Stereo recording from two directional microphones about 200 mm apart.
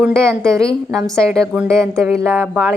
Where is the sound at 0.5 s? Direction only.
15° right (ahead or behind).